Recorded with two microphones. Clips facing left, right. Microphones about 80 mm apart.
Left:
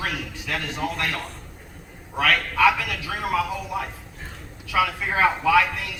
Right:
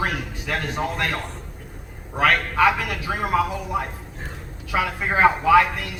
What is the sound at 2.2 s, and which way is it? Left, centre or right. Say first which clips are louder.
Speech: right 1 dB; right.